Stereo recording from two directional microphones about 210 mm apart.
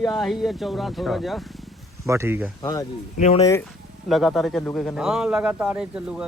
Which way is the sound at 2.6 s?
15° left (ahead or behind).